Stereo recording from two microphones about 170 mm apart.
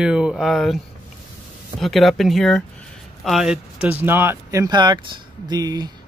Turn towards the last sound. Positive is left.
turn(degrees=-25)  # may be behind; listen again after turning